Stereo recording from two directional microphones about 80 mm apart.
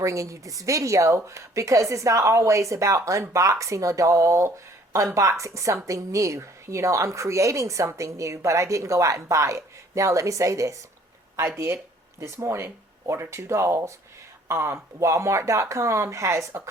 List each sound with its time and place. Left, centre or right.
0.0 s a woman's voice: right